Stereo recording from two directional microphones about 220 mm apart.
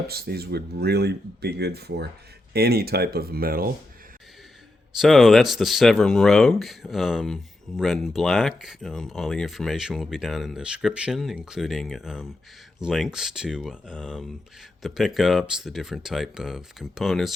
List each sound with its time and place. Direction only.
0.1 s speech: 45° right (ahead or behind)
4.9 s speech: centre (ahead or behind)